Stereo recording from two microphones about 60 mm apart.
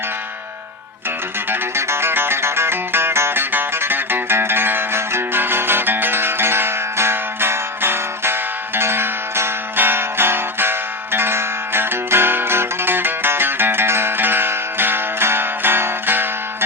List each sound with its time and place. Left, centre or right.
1.5 s music: right